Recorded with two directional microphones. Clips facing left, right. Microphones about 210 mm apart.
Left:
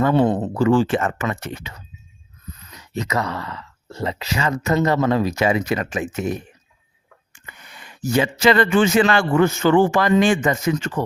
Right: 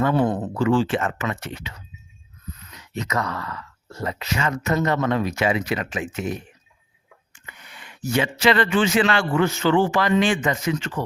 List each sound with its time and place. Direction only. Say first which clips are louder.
0.1 s speech: left 3 dB; 25° left (ahead or behind)
0.5 s speech: left 3 dB; 40° left (ahead or behind)
7.4 s speech: left 1 dB; 45° left (ahead or behind)